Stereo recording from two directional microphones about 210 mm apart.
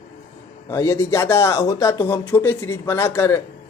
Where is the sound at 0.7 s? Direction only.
10° left (ahead or behind).